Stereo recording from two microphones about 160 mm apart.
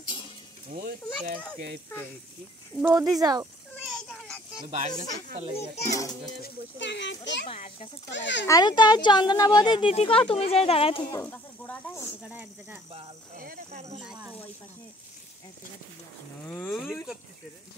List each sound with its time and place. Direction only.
0.7 s speech: 65° right (ahead or behind)
2.8 s speech: 15° right (ahead or behind)
3.8 s a sound: centre (ahead or behind)
4.7 s speech: 50° right (ahead or behind)
6.4 s a child's voice: 90° left
7.4 s a child's voice: 35° left (ahead or behind)
8.1 s a child's voice: 90° left
8.5 s speech: 25° left (ahead or behind)
11.1 s speech: 15° left (ahead or behind)
12.2 s speech: 10° right (ahead or behind)
16.4 s speech: 10° left (ahead or behind)